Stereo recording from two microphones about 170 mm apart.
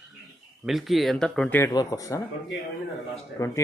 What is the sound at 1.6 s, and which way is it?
Speech, 20° left (ahead or behind).